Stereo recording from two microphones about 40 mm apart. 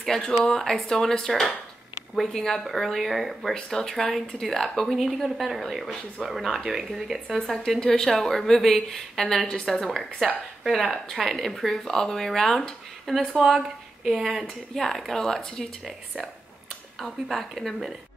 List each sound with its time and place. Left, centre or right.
0.0 s speech: centre
3.5 s speech: centre
4.9 s speech: centre
7.3 s speech: centre
11.2 s speech: centre
13.4 s speech: centre
14.1 s speech: centre
14.7 s speech: centre
17.3 s speech: centre